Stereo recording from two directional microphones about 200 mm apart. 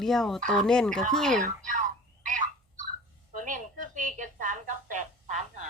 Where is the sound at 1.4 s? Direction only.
40° right (ahead or behind).